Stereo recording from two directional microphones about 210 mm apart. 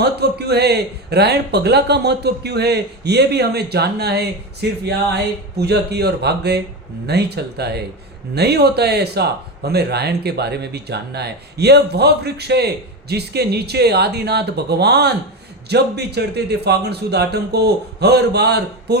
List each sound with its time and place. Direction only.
0.0 s speech: 50° right (ahead or behind)